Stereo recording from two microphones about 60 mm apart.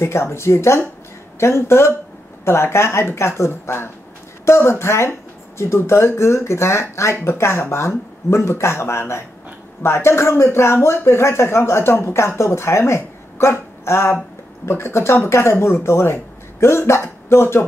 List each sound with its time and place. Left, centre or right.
0.0 s speech: left